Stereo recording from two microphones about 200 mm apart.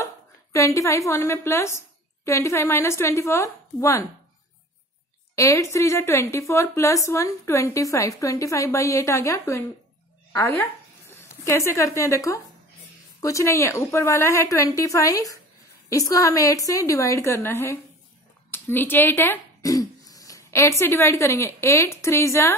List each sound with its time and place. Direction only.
0.0 s a woman's voice: 15° left (ahead or behind)
5.3 s a woman's voice: 15° left (ahead or behind)